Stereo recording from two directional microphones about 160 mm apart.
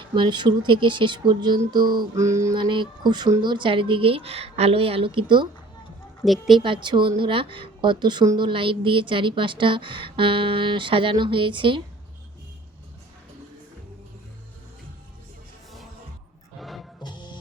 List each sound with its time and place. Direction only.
0.1 s speech: 30° right (ahead or behind)
2.6 s a woman's voice: 30° right (ahead or behind)
6.2 s speech: centre (ahead or behind)
6.6 s a woman's voice: 30° right (ahead or behind)
16.6 s music: centre (ahead or behind)
17.0 s music: 30° left (ahead or behind)